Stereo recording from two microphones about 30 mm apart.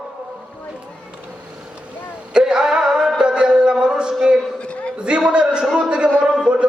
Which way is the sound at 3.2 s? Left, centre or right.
Right.